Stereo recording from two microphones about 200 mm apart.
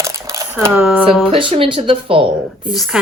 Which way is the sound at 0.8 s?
5° right (ahead or behind).